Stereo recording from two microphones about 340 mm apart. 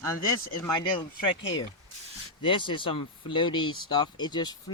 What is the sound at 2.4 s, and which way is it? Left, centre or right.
Speech, centre.